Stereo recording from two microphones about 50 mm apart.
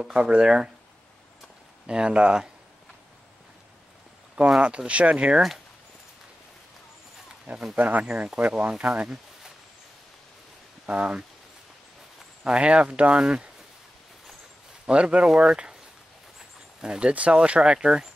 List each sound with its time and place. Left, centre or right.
0.1 s speech: right
1.9 s speech: centre
4.6 s speech: right
7.7 s speech: right
10.9 s speech: right
12.4 s speech: right
14.9 s speech: right
16.8 s speech: centre